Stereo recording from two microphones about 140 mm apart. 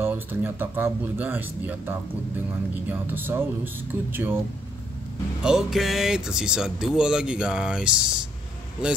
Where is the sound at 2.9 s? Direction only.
15° right (ahead or behind).